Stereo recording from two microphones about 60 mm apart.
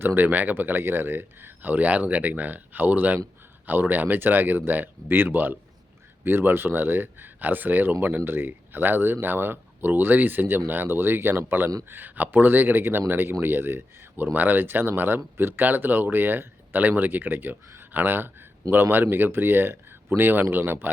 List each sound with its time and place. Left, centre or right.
0.0 s speech: right